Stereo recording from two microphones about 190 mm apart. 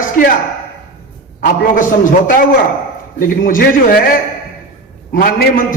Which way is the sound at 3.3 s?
45° left (ahead or behind).